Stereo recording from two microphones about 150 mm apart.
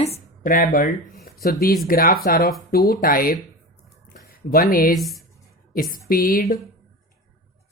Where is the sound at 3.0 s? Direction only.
75° left (ahead or behind).